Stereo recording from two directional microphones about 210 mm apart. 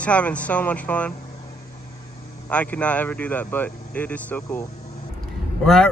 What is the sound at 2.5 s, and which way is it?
Speech, 5° left (ahead or behind).